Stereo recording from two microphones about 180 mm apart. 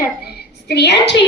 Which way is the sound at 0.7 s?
70° left (ahead or behind).